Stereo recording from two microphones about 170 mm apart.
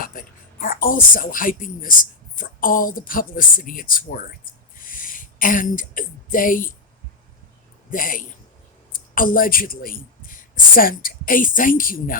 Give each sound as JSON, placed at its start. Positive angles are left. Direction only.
{"t": 0.0, "sound": "speech", "side_deg": 55}
{"t": 4.8, "sound": "a sound", "side_deg": 55}
{"t": 7.9, "sound": "a man's voice", "side_deg": 55}